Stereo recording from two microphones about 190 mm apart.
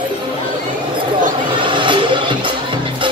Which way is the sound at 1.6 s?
25° right (ahead or behind).